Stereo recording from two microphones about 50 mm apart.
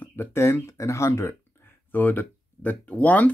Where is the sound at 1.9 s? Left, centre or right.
Left.